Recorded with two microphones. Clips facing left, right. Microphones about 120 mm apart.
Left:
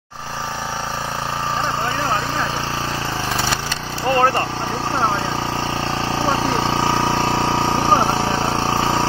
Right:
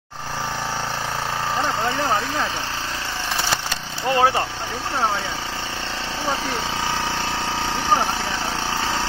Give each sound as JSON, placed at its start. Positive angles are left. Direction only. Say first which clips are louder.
{"t": 4.1, "sound": "speech", "louder": "left 2 dB", "side_deg": -5}
{"t": 6.2, "sound": "vehicle", "louder": "left 5 dB", "side_deg": 45}